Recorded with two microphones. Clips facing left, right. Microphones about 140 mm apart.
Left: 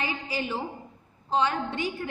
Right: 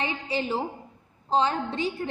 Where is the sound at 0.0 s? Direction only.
30° right (ahead or behind).